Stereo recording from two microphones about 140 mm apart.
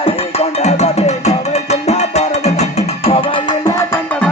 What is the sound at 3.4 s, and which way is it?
Music, 25° left (ahead or behind).